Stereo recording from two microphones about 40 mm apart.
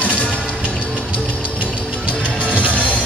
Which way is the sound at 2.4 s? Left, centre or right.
Left.